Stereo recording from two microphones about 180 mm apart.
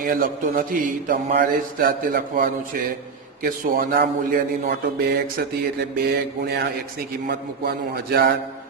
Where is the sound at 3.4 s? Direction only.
60° right (ahead or behind).